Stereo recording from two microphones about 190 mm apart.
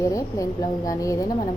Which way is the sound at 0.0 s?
15° left (ahead or behind).